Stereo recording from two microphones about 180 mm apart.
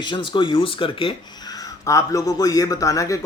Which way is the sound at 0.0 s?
25° left (ahead or behind).